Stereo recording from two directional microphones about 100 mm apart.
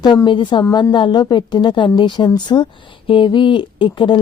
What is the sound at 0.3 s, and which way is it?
A woman's voice, 55° left (ahead or behind).